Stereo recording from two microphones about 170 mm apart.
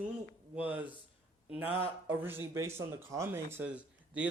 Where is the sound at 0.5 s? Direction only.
10° right (ahead or behind).